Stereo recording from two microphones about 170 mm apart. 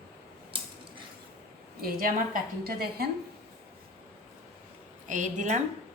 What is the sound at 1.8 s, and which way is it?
A woman's voice, 55° right (ahead or behind).